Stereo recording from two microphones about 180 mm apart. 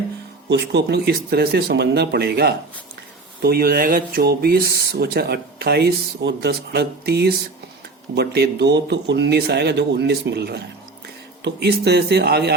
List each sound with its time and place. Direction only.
0.4 s speech: 70° right (ahead or behind)